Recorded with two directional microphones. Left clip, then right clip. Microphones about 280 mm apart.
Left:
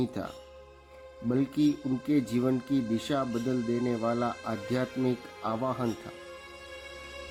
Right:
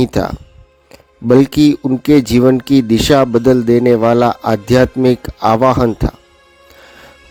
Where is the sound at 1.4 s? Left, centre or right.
Right.